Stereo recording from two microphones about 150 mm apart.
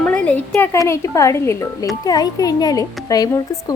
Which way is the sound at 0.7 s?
20° left (ahead or behind).